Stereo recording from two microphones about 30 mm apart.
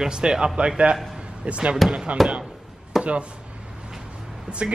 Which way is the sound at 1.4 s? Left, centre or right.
Right.